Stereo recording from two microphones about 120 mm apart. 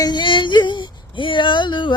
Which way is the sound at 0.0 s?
40° left (ahead or behind).